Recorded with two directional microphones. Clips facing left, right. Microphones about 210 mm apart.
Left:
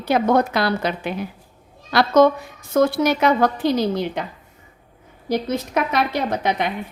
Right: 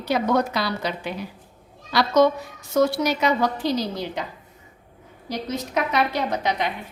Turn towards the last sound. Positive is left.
turn(degrees=55)  # may be behind; listen again after turning